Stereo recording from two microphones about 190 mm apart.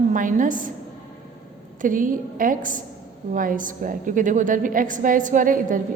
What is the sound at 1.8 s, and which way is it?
A woman's voice, 45° right (ahead or behind).